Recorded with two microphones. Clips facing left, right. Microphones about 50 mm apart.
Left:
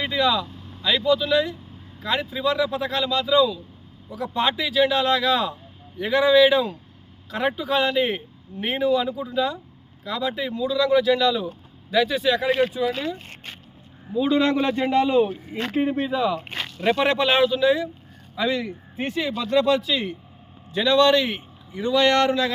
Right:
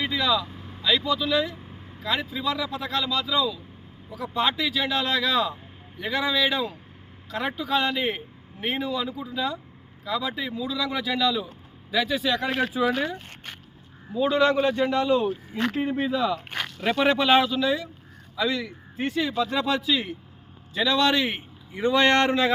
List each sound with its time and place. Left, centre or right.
0.0 s speech: centre
0.4 s vehicle: right
0.8 s speech: centre
14.1 s speech: centre
14.8 s speech: left
15.9 s speech: centre
18.3 s speech: centre
19.3 s speech: centre
21.1 s a man's voice: centre
21.7 s speech: right